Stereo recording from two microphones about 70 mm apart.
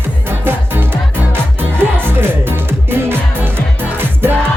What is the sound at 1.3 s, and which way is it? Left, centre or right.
Music, right.